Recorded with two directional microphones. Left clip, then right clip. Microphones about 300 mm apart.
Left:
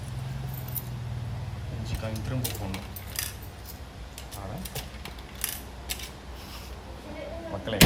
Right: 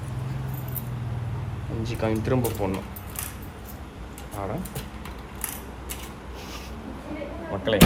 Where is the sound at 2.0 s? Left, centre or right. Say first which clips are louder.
Right 12 dB; centre.